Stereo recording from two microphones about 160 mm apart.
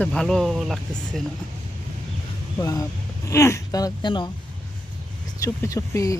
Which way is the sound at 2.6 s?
25° left (ahead or behind).